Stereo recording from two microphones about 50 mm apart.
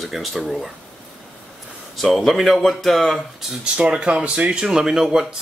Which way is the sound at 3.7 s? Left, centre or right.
Right.